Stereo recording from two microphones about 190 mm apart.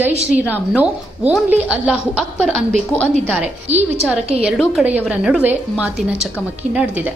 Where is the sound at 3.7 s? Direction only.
35° right (ahead or behind).